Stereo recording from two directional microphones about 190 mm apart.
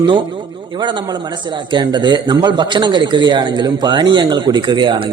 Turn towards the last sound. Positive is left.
turn(degrees=-25)  # may be behind; listen again after turning